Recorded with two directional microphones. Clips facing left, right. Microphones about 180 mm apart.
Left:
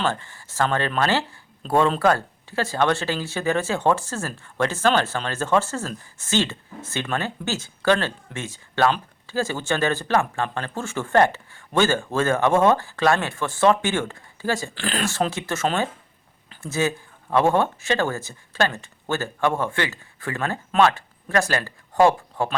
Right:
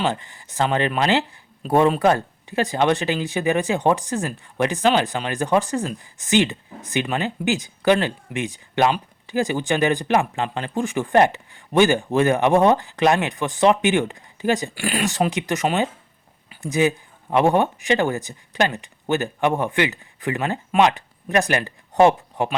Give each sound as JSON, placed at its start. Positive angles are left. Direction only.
{"t": 0.0, "sound": "speech", "side_deg": -15}